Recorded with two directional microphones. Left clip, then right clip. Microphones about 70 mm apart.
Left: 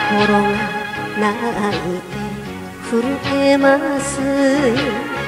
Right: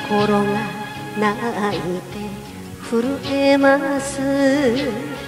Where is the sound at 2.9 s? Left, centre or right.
Right.